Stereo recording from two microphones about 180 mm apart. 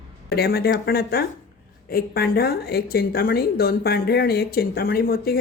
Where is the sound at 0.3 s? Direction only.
60° left (ahead or behind).